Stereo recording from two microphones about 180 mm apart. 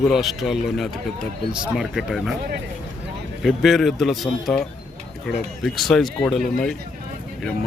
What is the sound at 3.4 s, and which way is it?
Speech, centre (ahead or behind).